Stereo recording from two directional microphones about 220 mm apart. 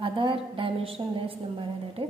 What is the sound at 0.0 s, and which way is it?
A woman's voice, 20° right (ahead or behind).